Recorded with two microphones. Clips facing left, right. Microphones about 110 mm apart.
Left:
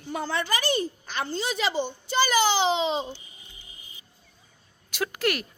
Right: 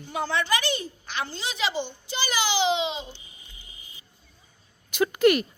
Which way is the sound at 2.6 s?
40° left (ahead or behind).